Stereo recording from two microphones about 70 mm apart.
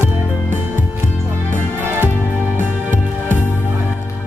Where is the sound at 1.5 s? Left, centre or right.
Right.